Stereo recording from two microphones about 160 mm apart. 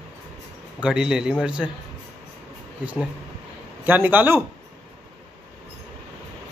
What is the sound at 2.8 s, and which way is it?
A man's voice, 10° right (ahead or behind).